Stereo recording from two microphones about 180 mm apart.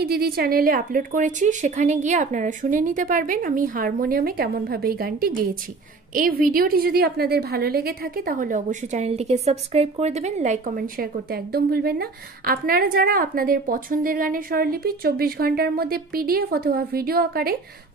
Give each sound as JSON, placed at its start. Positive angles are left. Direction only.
{"t": 0.0, "sound": "a woman's voice", "side_deg": -60}